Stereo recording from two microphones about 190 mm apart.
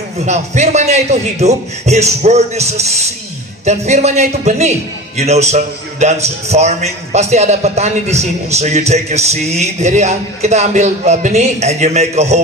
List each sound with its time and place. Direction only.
0.2 s a man's voice: 35° right (ahead or behind)